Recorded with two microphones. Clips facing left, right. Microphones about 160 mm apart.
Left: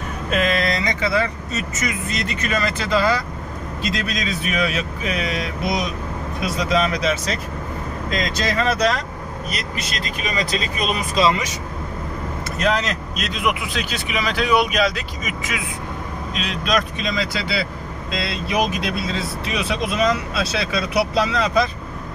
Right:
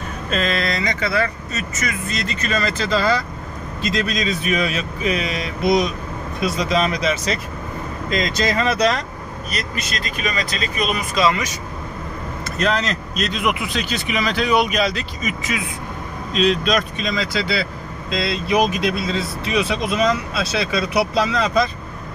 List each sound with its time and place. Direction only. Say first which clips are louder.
0.3 s speech: left 2 dB; 15° left (ahead or behind)
10.8 s speech: right 1 dB; 30° left (ahead or behind)
12.5 s speech: even; 10° left (ahead or behind)
16.4 s speech: right 3 dB; centre (ahead or behind)